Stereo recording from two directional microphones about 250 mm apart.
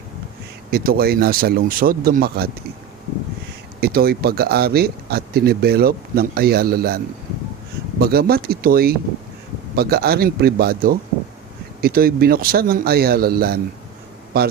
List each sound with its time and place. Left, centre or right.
0.7 s speech: right
3.8 s speech: right